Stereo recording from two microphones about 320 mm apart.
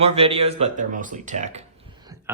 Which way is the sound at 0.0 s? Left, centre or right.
Centre.